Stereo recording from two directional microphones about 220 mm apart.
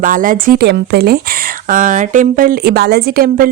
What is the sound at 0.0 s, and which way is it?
A woman's voice, 40° right (ahead or behind).